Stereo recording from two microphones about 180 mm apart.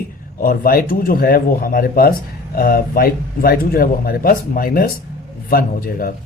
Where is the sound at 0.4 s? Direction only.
50° left (ahead or behind).